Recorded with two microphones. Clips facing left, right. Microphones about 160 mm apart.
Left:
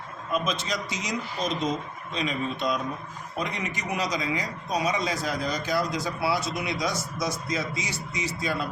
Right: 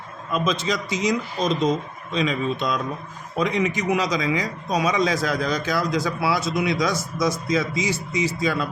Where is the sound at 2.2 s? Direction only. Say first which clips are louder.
Right 3 dB; 90° right.